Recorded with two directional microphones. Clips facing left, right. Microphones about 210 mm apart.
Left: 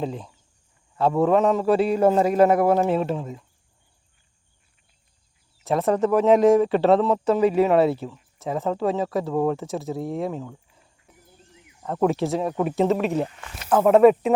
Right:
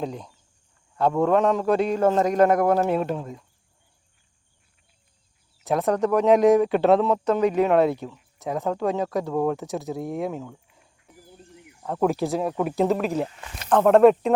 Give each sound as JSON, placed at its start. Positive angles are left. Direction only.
{"t": 0.0, "sound": "a man's voice", "side_deg": 5}
{"t": 5.5, "sound": "a man's voice", "side_deg": 0}